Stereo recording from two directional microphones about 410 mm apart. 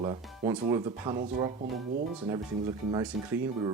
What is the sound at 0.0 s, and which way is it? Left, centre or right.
Speech, centre.